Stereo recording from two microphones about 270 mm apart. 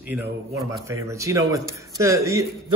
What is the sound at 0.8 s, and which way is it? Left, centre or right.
Speech, centre.